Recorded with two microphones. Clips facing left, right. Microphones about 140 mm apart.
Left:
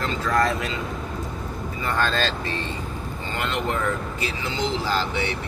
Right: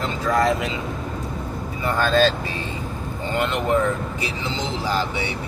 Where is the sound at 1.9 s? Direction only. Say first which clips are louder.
Right 6 dB; 10° right (ahead or behind).